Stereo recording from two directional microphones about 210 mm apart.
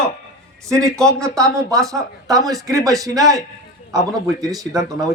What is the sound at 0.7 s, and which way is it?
Speech, 15° right (ahead or behind).